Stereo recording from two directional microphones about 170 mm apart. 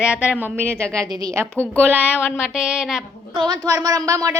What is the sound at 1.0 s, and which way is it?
Speech, 20° right (ahead or behind).